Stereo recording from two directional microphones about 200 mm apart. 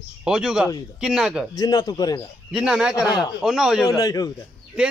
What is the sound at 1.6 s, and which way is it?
Speech, 20° left (ahead or behind).